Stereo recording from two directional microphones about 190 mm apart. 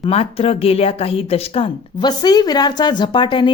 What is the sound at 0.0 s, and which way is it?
Speech, 30° left (ahead or behind).